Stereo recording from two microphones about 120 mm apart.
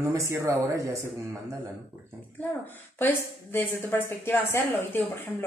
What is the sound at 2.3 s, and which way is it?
A woman's voice, 15° left (ahead or behind).